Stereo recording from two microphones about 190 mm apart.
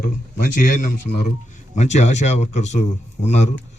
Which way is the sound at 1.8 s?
35° left (ahead or behind).